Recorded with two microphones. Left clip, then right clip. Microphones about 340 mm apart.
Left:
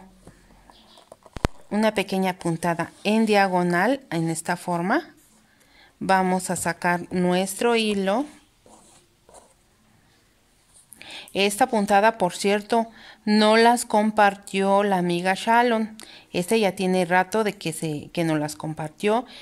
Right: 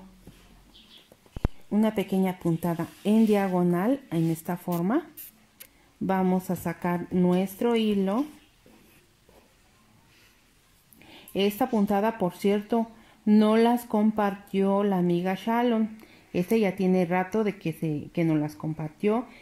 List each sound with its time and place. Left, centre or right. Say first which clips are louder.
1.3 s speech: left 4 dB; left
6.0 s speech: left 6 dB; left
11.0 s speech: left 4 dB; left